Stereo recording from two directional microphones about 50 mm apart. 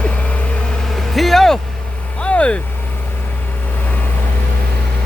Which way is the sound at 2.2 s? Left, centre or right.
Left.